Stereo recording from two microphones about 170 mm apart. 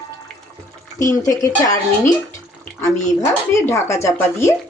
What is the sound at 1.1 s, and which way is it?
Speech, 20° left (ahead or behind).